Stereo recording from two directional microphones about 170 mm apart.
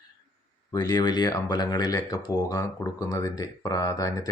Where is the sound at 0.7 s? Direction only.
25° left (ahead or behind).